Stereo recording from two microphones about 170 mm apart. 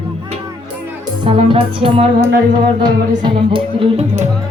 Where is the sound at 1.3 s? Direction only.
30° right (ahead or behind).